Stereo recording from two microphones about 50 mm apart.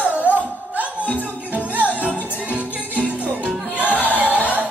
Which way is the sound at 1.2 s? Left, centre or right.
Right.